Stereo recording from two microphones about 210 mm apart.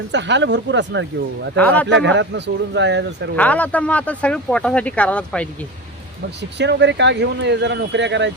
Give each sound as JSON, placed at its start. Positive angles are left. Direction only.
{"t": 0.1, "sound": "speech", "side_deg": -55}
{"t": 1.5, "sound": "speech", "side_deg": 5}
{"t": 1.9, "sound": "speech", "side_deg": -60}
{"t": 3.3, "sound": "speech", "side_deg": 5}
{"t": 6.6, "sound": "speech", "side_deg": -55}